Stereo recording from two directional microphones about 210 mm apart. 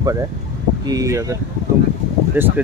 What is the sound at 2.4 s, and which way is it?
Speech, 10° right (ahead or behind).